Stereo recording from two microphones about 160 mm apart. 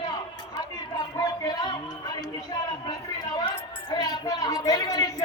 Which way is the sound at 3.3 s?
30° left (ahead or behind).